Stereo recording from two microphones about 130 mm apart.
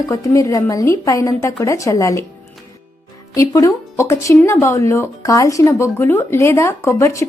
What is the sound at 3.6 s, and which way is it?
Speech, 25° left (ahead or behind).